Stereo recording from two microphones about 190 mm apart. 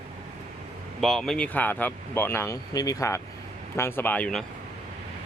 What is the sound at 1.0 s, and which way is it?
Speech, centre (ahead or behind).